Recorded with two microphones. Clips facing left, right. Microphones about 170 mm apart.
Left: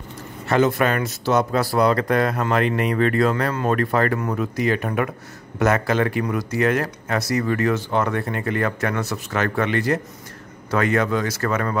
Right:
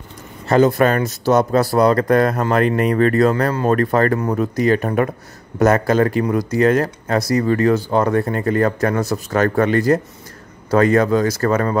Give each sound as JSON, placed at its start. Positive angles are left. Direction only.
{"t": 0.5, "sound": "speech", "side_deg": -35}